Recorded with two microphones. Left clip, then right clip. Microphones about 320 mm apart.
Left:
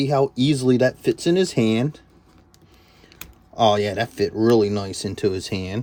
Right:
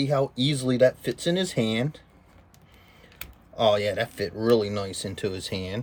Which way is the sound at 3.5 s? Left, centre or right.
Centre.